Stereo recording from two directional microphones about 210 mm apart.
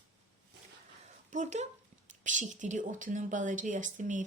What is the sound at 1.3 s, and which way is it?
A woman's voice, 35° right (ahead or behind).